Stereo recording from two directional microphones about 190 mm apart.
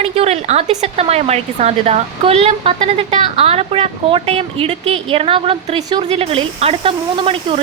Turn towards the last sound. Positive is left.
turn(degrees=-30)  # may be behind; listen again after turning